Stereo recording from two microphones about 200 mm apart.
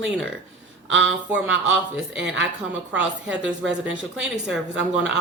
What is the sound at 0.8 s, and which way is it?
Speech, 70° right (ahead or behind).